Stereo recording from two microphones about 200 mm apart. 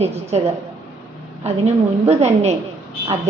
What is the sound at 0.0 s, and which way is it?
Speech, 35° right (ahead or behind).